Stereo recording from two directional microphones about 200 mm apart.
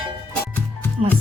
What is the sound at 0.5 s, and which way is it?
Music, 10° left (ahead or behind).